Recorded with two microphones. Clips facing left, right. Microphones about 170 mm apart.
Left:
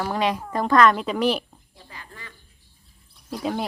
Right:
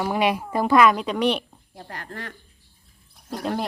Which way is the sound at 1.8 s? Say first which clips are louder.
Right 8 dB; 70° right (ahead or behind).